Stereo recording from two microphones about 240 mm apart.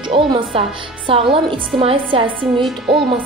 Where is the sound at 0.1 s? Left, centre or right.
Right.